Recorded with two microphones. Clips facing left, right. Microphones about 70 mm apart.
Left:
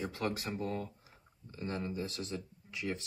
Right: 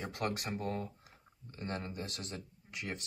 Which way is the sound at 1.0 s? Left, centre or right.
Right.